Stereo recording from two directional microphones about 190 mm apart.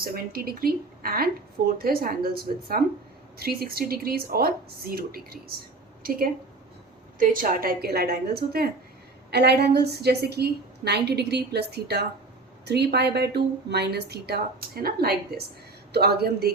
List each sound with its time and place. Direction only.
0.0 s a woman's voice: 50° right (ahead or behind)